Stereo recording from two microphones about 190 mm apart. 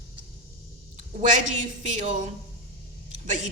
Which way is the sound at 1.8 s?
40° right (ahead or behind).